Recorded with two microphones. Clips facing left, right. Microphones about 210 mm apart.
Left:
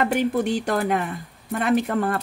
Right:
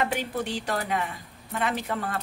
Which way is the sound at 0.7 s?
50° left (ahead or behind).